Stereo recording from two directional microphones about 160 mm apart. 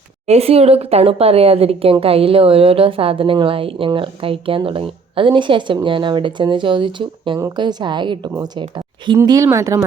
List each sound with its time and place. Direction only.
0.3 s speech: 40° right (ahead or behind); by 9.8 s 20° right (ahead or behind)